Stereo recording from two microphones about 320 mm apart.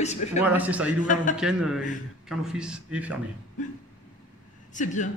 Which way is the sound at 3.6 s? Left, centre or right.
Left.